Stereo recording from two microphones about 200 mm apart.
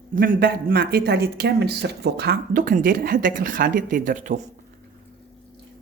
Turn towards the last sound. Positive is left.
turn(degrees=-40)  # may be behind; listen again after turning